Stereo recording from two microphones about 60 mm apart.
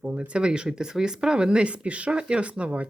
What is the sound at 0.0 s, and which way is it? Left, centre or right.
Speech, centre.